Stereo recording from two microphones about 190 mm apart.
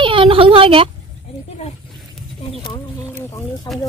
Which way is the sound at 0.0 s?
25° right (ahead or behind).